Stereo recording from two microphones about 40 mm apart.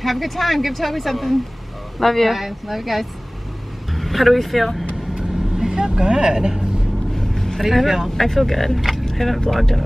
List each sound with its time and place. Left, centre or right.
0.0 s speech: centre
2.3 s speech: centre
5.1 s vehicle: centre
7.2 s vehicle: centre
7.6 s speech: centre
9.0 s vehicle: centre
9.6 s speech: centre